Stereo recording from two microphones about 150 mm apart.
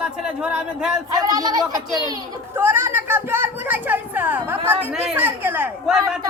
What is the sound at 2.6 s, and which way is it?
Speech, 15° right (ahead or behind).